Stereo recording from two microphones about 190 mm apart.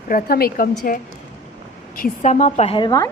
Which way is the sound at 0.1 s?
50° left (ahead or behind).